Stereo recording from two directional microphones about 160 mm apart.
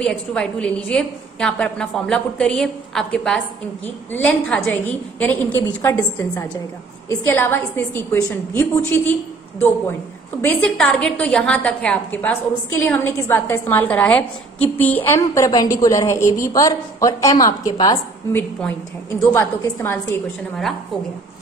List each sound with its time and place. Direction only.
0.0 s a woman's voice: 5° left (ahead or behind)
10.4 s a woman's voice: 5° left (ahead or behind); by 18.0 s 25° left (ahead or behind)
18.3 s a woman's voice: 10° left (ahead or behind)